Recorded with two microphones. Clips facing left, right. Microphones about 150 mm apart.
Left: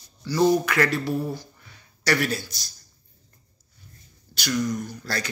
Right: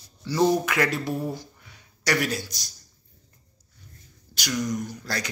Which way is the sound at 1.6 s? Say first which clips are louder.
Even; 15° right (ahead or behind).